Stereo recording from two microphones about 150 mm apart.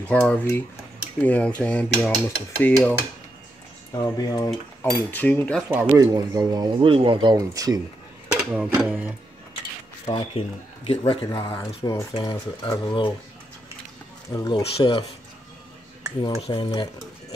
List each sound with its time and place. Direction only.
0.1 s dishes: 10° left (ahead or behind)
3.9 s speech: 25° left (ahead or behind)
5.1 s dishes: 10° left (ahead or behind)
5.7 s speech: 10° right (ahead or behind)
5.9 s speech: 25° right (ahead or behind)
6.8 s speech: 35° right (ahead or behind)
7.3 s speech: 25° right (ahead or behind)
8.4 s speech: 10° right (ahead or behind)
10.0 s speech: 35° left (ahead or behind)
11.3 s speech: 25° left (ahead or behind)
14.3 s speech: 25° left (ahead or behind)
14.6 s speech: 35° left (ahead or behind)
16.4 s speech: 35° left (ahead or behind)